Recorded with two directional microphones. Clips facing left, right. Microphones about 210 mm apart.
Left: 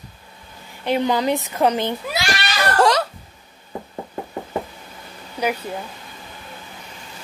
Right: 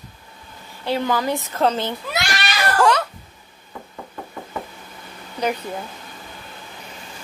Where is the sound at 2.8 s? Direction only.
35° left (ahead or behind).